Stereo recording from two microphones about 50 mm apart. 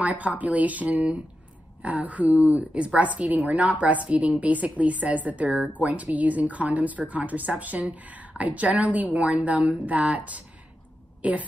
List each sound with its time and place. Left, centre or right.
0.0 s a woman's voice: right